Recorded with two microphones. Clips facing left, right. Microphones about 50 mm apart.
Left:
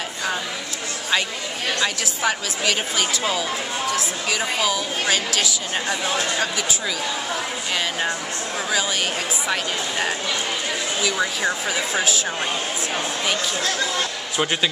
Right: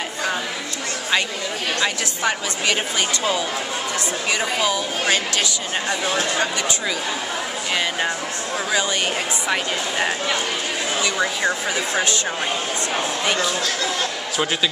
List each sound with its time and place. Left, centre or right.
2.2 s a woman's voice: centre
9.5 s speech: centre
11.0 s a woman's voice: centre